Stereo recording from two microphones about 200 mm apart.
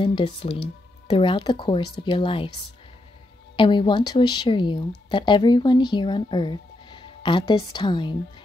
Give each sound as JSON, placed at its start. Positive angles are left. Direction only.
{"t": 0.0, "sound": "speech", "side_deg": 25}
{"t": 3.5, "sound": "speech", "side_deg": 25}